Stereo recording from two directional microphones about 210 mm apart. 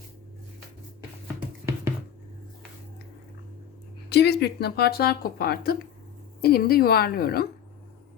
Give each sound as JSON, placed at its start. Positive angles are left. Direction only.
{"t": 4.1, "sound": "speech", "side_deg": 50}